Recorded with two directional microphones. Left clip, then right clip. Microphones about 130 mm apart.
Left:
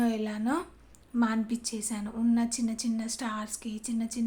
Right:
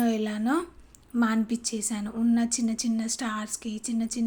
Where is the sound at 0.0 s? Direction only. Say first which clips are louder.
Right 3 dB; 25° right (ahead or behind).